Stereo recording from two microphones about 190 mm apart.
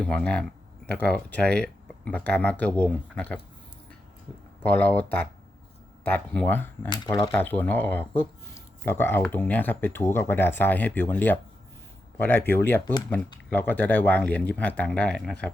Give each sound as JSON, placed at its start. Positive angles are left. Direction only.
{"t": 0.0, "sound": "speech", "side_deg": 5}
{"t": 4.6, "sound": "speech", "side_deg": 10}
{"t": 7.3, "sound": "speech", "side_deg": 10}